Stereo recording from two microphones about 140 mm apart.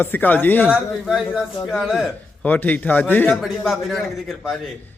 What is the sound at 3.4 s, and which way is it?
A man's voice, centre (ahead or behind).